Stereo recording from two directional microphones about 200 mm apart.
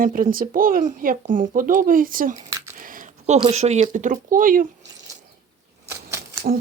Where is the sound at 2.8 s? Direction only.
40° right (ahead or behind).